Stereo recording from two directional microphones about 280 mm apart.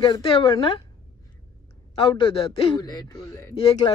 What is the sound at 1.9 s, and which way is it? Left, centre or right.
A man's voice, centre.